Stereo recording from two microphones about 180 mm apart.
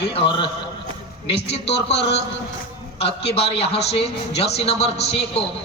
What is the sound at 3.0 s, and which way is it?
A man's voice, 35° left (ahead or behind).